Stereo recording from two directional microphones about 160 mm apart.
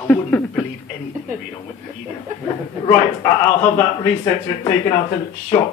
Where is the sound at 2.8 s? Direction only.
20° left (ahead or behind).